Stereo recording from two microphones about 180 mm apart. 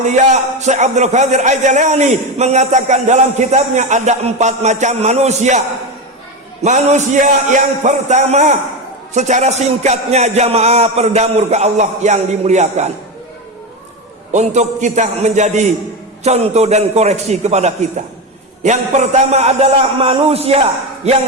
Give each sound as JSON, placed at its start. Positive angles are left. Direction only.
{"t": 0.0, "sound": "a man's voice", "side_deg": -40}
{"t": 14.3, "sound": "a man's voice", "side_deg": -40}